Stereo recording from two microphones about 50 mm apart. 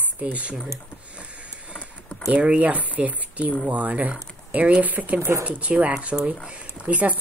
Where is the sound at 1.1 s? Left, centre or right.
Right.